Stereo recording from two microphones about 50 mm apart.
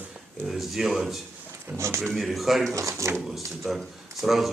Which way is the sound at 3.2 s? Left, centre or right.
Centre.